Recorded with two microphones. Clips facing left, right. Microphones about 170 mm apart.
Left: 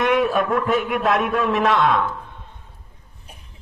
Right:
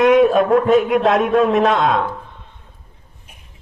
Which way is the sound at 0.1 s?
40° right (ahead or behind).